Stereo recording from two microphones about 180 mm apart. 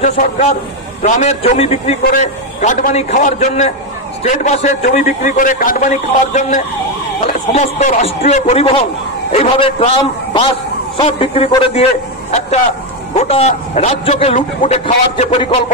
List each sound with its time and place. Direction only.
0.0 s a man's voice: 40° left (ahead or behind)